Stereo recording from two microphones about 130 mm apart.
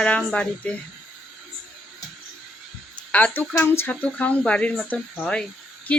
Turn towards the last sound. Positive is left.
turn(degrees=10)  # may be behind; listen again after turning